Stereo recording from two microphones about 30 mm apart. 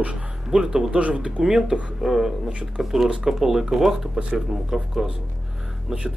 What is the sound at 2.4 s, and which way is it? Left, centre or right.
Speech, right.